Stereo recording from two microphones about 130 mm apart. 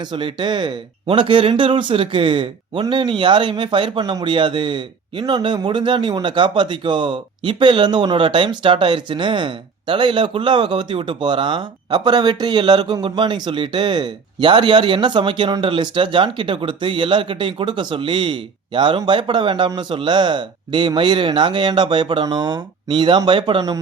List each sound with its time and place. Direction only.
0.1 s speech: 40° right (ahead or behind)